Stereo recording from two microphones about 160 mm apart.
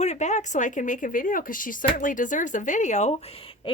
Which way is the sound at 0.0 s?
45° left (ahead or behind).